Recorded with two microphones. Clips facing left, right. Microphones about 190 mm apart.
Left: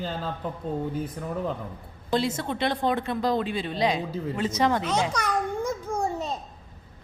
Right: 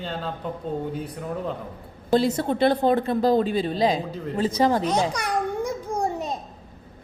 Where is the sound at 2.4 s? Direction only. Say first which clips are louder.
Right 6 dB; 40° right (ahead or behind).